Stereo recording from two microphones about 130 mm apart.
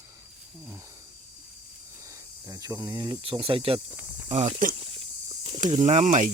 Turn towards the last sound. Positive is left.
turn(degrees=-70)  # may be behind; listen again after turning